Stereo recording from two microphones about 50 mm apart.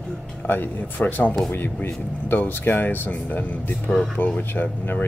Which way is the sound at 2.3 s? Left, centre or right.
Left.